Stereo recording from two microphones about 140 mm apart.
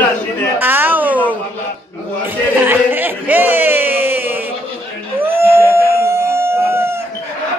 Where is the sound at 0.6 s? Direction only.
15° right (ahead or behind).